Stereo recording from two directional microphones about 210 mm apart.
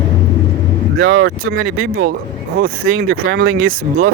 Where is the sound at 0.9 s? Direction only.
60° right (ahead or behind).